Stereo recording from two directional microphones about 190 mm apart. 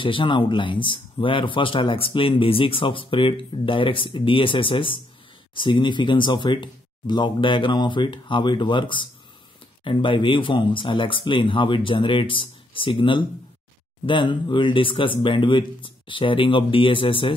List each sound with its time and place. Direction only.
0.0 s speech: 25° left (ahead or behind)